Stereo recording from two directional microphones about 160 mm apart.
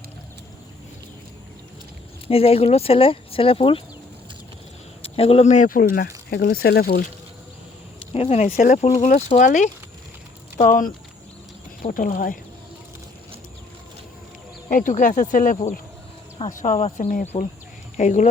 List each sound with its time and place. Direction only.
2.2 s speech: 35° left (ahead or behind)
5.0 s speech: 40° left (ahead or behind); by 7.0 s 80° left
8.1 s speech: 40° left (ahead or behind)
10.6 s speech: 60° left (ahead or behind)
14.7 s speech: 55° left (ahead or behind)
16.7 s speech: 40° left (ahead or behind)